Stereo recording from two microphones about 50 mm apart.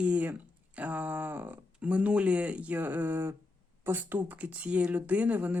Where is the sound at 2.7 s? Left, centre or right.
Right.